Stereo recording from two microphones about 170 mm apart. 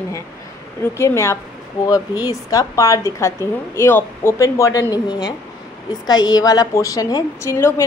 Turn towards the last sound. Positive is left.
turn(degrees=15)  # may be behind; listen again after turning